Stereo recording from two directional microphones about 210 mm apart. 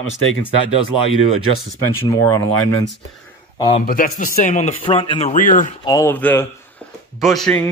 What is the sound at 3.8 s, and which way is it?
A man's voice, 40° left (ahead or behind).